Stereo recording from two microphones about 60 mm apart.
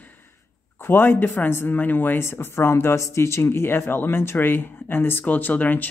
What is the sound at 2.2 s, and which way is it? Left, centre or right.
Speech, left.